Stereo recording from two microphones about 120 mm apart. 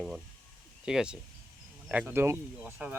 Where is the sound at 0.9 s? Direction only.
5° right (ahead or behind).